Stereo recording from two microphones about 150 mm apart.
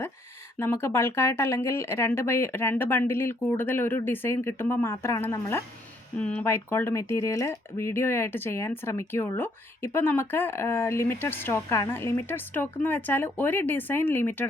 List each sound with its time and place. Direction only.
0.6 s speech: 15° left (ahead or behind)